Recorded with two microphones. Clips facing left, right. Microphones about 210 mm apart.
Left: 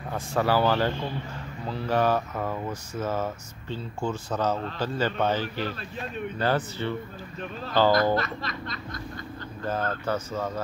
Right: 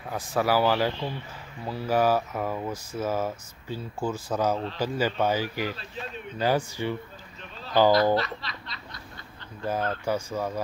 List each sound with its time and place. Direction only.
0.4 s speech: 10° right (ahead or behind)
8.2 s snicker: 50° left (ahead or behind)
9.7 s speech: 10° right (ahead or behind)